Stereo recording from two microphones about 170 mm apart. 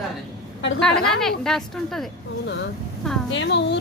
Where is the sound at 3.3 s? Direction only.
90° left.